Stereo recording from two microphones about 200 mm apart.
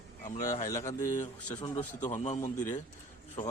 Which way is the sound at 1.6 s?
30° left (ahead or behind).